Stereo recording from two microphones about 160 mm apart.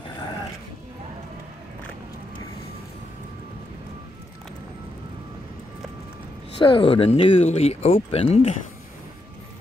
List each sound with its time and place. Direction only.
6.6 s speech: 35° left (ahead or behind)